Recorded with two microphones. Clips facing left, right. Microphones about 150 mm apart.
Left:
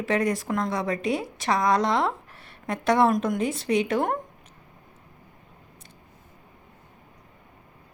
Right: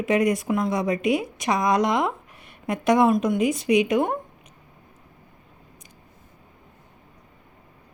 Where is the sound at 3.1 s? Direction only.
5° right (ahead or behind).